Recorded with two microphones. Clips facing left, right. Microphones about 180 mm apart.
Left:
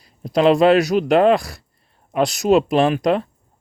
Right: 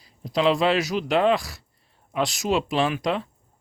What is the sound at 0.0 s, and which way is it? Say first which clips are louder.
Speech: left 6 dB; 55° left (ahead or behind).